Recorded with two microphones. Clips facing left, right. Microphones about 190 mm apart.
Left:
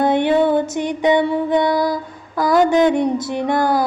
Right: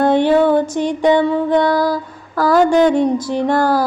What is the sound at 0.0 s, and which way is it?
Music, 20° left (ahead or behind).